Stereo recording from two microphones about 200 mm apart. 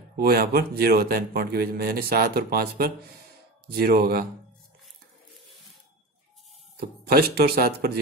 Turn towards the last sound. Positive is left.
turn(degrees=-50)  # may be behind; listen again after turning